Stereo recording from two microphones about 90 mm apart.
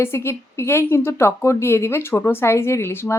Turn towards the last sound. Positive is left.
turn(degrees=30)  # may be behind; listen again after turning